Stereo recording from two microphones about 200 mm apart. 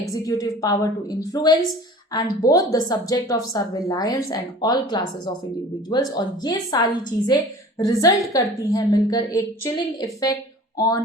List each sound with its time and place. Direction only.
0.1 s a woman's voice: 15° left (ahead or behind)